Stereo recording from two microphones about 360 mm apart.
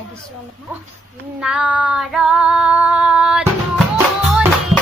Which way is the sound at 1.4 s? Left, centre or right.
Centre.